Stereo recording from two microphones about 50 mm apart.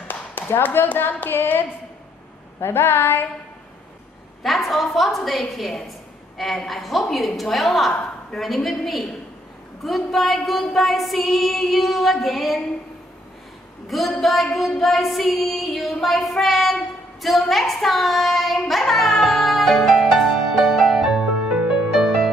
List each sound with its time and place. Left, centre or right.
0.1 s speech: left
2.6 s a sound: left
4.4 s female singing: centre
13.8 s female singing: centre
17.2 s child singing: centre
21.5 s music: centre
21.9 s music: centre